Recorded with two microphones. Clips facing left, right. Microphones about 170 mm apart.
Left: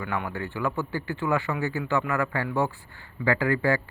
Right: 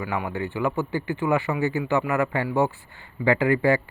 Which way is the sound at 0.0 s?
10° right (ahead or behind).